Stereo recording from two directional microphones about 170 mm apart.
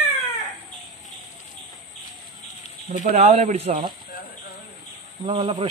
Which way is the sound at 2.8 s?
45° right (ahead or behind).